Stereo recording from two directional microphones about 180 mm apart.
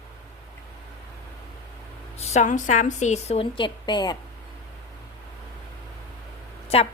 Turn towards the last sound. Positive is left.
turn(degrees=35)  # may be behind; listen again after turning